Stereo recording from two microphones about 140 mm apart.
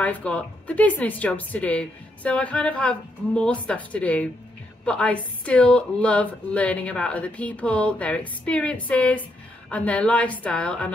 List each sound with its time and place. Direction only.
0.0 s a woman's voice: 10° left (ahead or behind)